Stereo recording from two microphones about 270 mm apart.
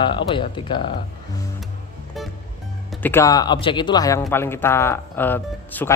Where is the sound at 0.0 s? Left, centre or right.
Centre.